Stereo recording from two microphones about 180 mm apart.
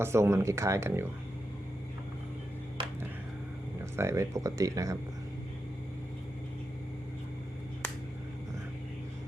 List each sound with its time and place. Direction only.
0.0 s speech: 15° right (ahead or behind)
3.9 s speech: 15° right (ahead or behind)